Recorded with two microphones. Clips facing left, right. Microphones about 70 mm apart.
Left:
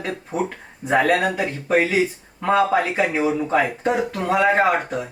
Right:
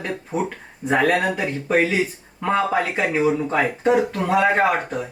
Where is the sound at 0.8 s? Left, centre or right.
Centre.